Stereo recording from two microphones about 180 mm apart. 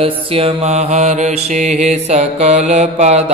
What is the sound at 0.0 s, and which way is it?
Mantra, 30° right (ahead or behind).